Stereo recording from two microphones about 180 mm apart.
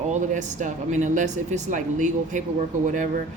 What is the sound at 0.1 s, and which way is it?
Speech, 45° right (ahead or behind).